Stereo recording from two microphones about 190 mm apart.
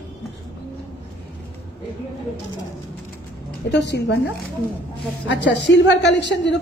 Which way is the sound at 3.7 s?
65° left (ahead or behind).